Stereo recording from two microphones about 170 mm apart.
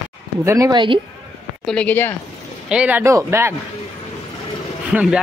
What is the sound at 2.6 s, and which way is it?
Speech, 5° right (ahead or behind).